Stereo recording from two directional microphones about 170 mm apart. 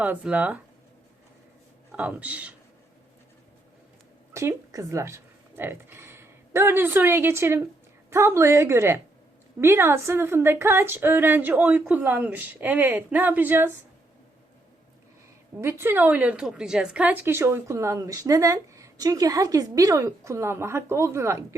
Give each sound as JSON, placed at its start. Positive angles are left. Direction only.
{"t": 0.0, "sound": "a woman's voice", "side_deg": -10}
{"t": 1.9, "sound": "a man's voice", "side_deg": -10}
{"t": 4.4, "sound": "a woman's voice", "side_deg": -15}
{"t": 15.6, "sound": "a woman's voice", "side_deg": -15}